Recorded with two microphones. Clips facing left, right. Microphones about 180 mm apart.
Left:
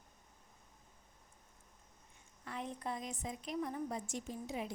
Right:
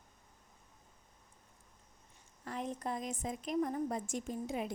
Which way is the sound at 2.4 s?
40° right (ahead or behind).